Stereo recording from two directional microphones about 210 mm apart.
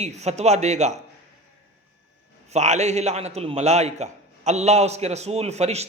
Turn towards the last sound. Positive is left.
turn(degrees=-30)  # may be behind; listen again after turning